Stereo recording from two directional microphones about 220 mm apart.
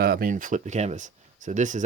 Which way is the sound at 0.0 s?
40° right (ahead or behind).